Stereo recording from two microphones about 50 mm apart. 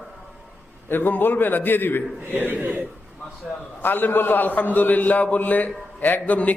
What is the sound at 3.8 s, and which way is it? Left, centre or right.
A man's voice, left.